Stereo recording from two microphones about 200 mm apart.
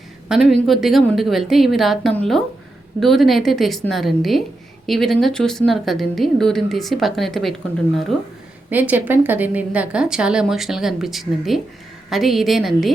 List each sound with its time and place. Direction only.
0.3 s speech: centre (ahead or behind)
8.7 s speech: 10° right (ahead or behind)